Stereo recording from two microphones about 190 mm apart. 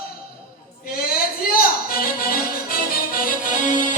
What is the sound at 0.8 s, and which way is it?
Music, 50° left (ahead or behind).